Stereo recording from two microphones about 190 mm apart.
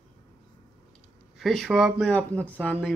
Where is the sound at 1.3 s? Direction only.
Centre (ahead or behind).